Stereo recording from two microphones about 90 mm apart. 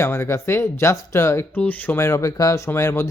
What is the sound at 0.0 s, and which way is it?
Speech, 30° left (ahead or behind).